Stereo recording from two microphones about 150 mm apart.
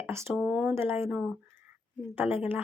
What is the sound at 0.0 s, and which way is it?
Speech, 15° right (ahead or behind).